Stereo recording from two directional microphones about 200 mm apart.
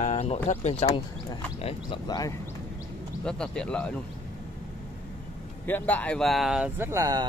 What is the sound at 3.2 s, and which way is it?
Speech, 5° left (ahead or behind).